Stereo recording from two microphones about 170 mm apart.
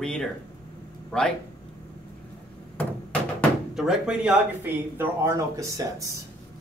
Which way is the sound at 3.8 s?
5° right (ahead or behind).